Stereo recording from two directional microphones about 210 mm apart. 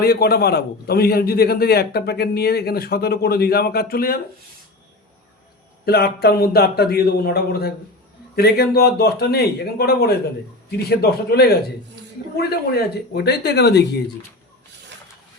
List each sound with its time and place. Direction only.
0.0 s a man's voice: 50° left (ahead or behind)
5.8 s a man's voice: 50° left (ahead or behind)